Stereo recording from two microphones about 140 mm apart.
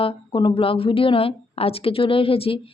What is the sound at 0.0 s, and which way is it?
Speech, 40° left (ahead or behind).